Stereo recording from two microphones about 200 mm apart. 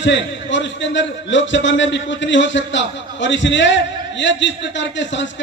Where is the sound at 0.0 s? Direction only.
65° left (ahead or behind).